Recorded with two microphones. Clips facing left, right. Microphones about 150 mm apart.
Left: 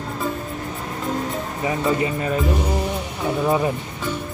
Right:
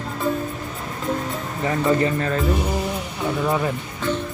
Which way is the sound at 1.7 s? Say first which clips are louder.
Right 2 dB; 15° left (ahead or behind).